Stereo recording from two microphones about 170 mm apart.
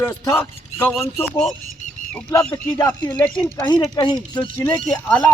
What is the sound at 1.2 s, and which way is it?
Speech, 5° left (ahead or behind).